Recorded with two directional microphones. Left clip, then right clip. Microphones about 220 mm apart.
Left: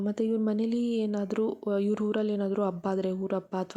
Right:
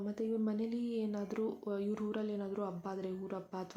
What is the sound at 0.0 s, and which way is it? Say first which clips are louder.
Speech: left 8 dB; 40° left (ahead or behind).